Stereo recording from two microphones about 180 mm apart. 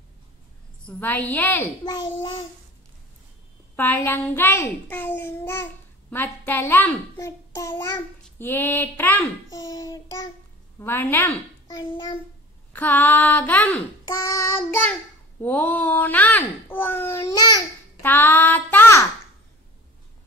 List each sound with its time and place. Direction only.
0.8 s a child's voice: 10° left (ahead or behind)
1.9 s a child's voice: 25° left (ahead or behind)
3.7 s a child's voice: 10° left (ahead or behind)
9.7 s a child's voice: 20° left (ahead or behind)
11.8 s a child's voice: 30° left (ahead or behind)
12.7 s a child's voice: 10° left (ahead or behind)